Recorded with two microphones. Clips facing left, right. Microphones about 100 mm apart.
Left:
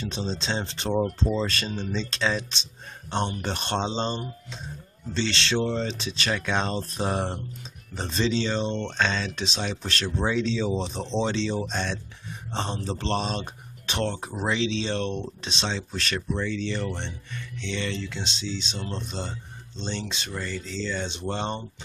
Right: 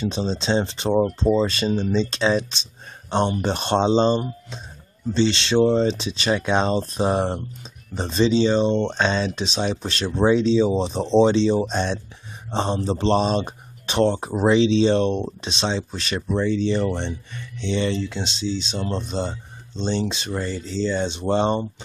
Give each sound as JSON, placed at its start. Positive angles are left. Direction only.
{"t": 0.1, "sound": "speech", "side_deg": -20}
{"t": 10.8, "sound": "speech", "side_deg": -30}